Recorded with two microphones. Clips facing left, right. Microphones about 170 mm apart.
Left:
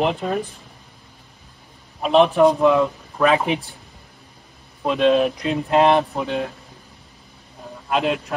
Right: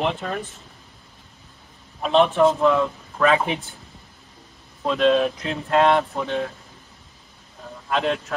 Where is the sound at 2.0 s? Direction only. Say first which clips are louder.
Left 3 dB; 10° left (ahead or behind).